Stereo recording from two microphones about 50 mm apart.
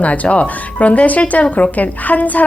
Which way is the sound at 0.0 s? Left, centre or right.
Left.